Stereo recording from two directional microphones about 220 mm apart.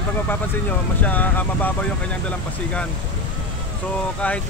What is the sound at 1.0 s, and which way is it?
Speech, 10° left (ahead or behind).